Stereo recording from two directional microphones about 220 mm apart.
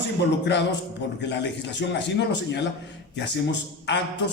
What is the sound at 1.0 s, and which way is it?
A man's voice, 55° left (ahead or behind).